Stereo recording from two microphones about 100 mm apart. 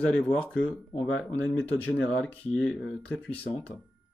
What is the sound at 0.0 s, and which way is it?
Speech, 10° left (ahead or behind).